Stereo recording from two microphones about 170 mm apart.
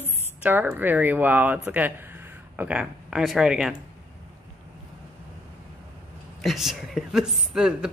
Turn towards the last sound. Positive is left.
turn(degrees=-5)  # may be behind; listen again after turning